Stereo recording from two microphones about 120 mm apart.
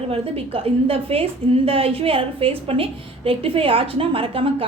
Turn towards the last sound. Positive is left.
turn(degrees=-50)  # may be behind; listen again after turning